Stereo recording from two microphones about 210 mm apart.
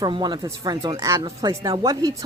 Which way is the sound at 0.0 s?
20° right (ahead or behind).